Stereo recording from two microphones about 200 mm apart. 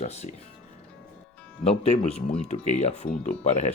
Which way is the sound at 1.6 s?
30° left (ahead or behind).